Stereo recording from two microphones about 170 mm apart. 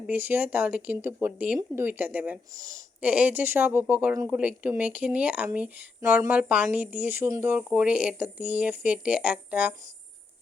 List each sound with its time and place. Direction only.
0.1 s speech: 10° right (ahead or behind)
3.0 s speech: 10° right (ahead or behind)